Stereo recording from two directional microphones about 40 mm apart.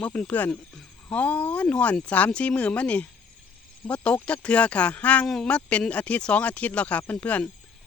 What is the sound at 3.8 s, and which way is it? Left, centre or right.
Speech, centre.